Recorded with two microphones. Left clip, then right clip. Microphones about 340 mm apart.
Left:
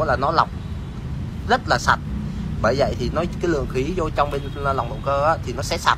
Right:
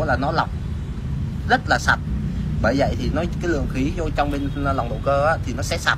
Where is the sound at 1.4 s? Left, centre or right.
Centre.